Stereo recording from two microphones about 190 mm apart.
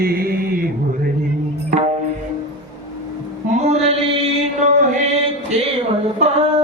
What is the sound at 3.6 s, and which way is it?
Mantra, 35° right (ahead or behind).